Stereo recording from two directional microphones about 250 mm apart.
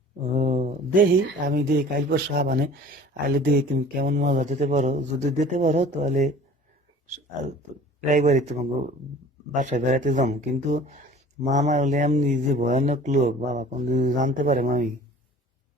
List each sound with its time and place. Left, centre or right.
0.3 s a sound: right
1.5 s speech: right
8.0 s speech: right